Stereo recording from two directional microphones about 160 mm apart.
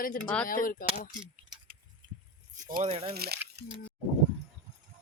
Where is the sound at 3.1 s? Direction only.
80° right.